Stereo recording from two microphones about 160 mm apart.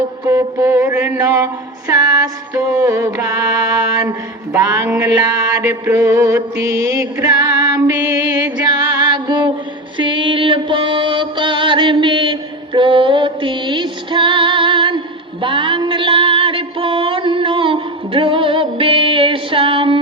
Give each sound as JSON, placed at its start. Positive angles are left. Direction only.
{"t": 0.3, "sound": "music", "side_deg": -20}